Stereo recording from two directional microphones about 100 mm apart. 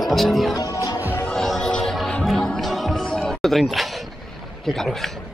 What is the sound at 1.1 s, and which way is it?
Music, 15° left (ahead or behind).